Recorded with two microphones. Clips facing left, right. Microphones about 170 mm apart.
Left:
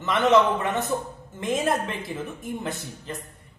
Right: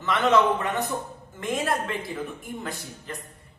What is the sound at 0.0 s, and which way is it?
Speech, 20° left (ahead or behind).